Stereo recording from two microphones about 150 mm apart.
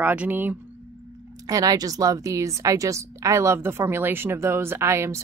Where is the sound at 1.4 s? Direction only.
25° right (ahead or behind).